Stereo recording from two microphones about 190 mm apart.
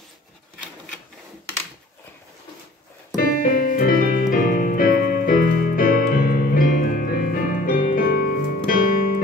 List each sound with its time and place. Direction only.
3.2 s music: 50° left (ahead or behind)